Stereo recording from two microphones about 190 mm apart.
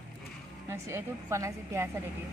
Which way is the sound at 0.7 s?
15° right (ahead or behind).